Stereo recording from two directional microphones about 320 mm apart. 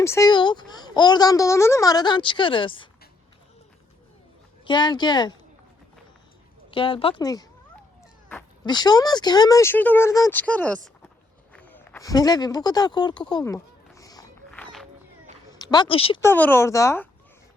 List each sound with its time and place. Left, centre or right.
0.0 s speech: centre
4.6 s speech: centre
6.7 s speech: centre
11.5 s a sound: centre
15.5 s speech: centre